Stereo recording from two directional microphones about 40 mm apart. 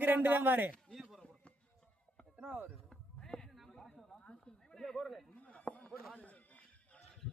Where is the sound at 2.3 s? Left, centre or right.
Right.